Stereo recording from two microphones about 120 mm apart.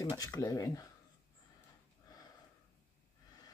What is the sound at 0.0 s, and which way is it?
Speech, 30° left (ahead or behind).